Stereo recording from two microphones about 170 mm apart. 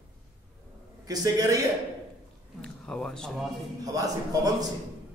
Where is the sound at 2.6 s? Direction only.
5° left (ahead or behind).